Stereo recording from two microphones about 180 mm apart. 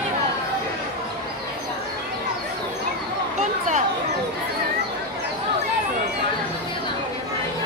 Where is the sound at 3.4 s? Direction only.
40° right (ahead or behind).